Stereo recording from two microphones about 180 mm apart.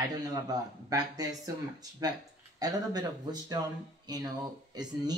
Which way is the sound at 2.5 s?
20° right (ahead or behind).